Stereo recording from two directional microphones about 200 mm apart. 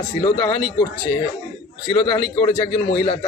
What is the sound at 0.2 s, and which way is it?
Speech, 25° left (ahead or behind).